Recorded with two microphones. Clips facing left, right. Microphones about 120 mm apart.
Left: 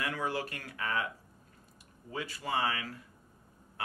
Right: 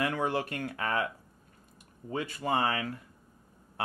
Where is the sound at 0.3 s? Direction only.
60° right (ahead or behind).